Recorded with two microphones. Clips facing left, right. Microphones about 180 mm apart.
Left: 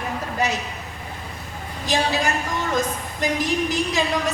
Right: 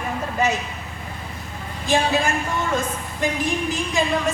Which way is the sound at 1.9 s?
40° left (ahead or behind).